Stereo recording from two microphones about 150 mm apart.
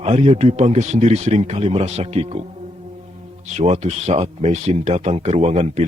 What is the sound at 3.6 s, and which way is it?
A man's voice, 45° right (ahead or behind).